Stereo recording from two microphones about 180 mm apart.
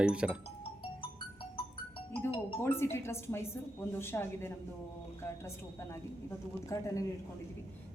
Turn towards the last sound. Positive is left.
turn(degrees=20)  # may be behind; listen again after turning